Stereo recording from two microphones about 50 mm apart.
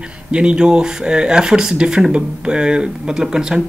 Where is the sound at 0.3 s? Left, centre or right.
Centre.